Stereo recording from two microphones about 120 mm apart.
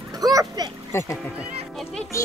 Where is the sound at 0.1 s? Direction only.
30° right (ahead or behind).